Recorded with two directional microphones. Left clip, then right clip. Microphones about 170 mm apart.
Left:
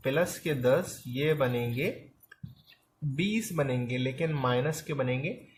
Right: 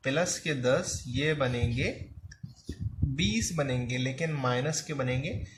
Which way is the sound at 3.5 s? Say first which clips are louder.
Left 1 dB; 35° left (ahead or behind).